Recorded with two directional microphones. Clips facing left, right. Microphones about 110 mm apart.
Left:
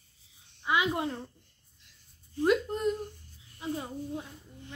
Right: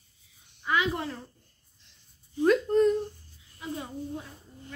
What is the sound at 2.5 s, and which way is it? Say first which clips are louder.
Speech: right 5 dB; 10° left (ahead or behind).